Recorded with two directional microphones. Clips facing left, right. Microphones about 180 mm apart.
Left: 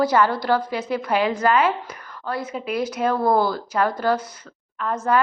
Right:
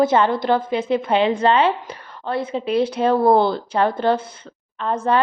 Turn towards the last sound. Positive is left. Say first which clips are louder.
# right 3 dB
turn(degrees=-30)  # may be behind; listen again after turning